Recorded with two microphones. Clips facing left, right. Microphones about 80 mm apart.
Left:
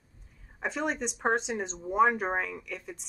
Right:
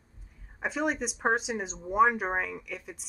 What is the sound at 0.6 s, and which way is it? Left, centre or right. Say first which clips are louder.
Speech: right 1 dB; centre.